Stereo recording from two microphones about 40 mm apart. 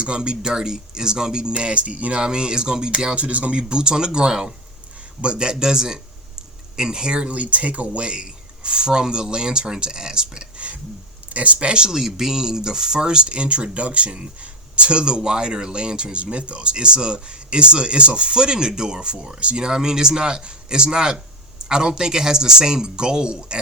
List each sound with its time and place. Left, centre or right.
0.0 s speech: right
2.2 s speech: right
3.6 s speech: centre
11.3 s speech: right